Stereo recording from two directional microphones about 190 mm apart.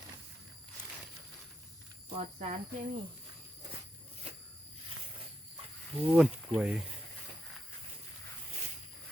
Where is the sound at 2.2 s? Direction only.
35° right (ahead or behind).